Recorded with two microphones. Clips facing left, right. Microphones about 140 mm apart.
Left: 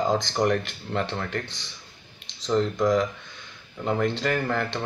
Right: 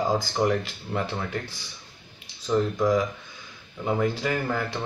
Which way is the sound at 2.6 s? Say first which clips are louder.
Left 1 dB; 5° right (ahead or behind).